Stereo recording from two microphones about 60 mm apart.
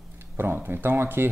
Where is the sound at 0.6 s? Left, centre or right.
Right.